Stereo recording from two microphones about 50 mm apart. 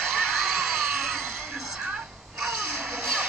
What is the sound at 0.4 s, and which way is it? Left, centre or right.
Screaming, centre.